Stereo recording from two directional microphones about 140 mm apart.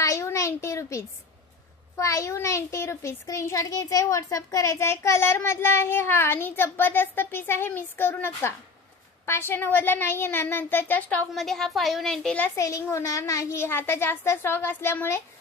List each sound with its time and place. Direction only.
0.0 s a sound: 20° left (ahead or behind)
2.0 s a child's voice: 20° left (ahead or behind); by 12.4 s 5° left (ahead or behind)
12.4 s a woman's voice: 25° left (ahead or behind)